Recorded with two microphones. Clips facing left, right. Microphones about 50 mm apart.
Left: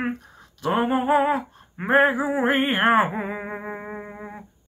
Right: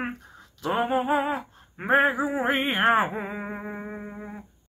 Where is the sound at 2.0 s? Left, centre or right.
Centre.